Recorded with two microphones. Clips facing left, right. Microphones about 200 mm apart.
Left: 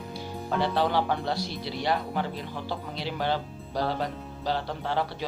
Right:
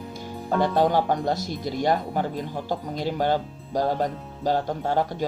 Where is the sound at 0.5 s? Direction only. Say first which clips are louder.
Right 5 dB; 45° right (ahead or behind).